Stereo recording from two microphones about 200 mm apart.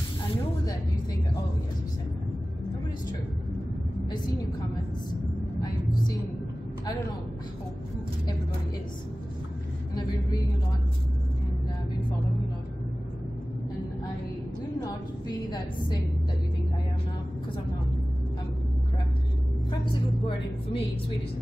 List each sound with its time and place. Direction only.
19.8 s a woman's voice: 25° left (ahead or behind)